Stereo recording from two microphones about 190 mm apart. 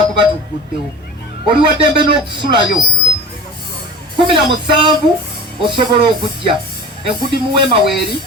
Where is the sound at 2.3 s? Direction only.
25° right (ahead or behind).